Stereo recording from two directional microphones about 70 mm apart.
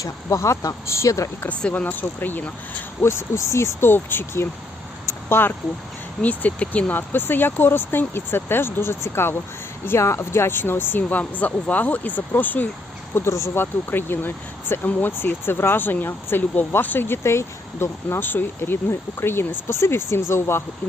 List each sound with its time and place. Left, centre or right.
0.0 s speech: left
1.7 s speech: left
3.0 s speech: left
5.0 s a sound: left
6.2 s speech: left
7.1 s speech: left
13.1 s speech: left